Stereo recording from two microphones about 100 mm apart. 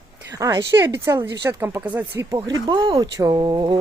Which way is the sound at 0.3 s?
30° right (ahead or behind).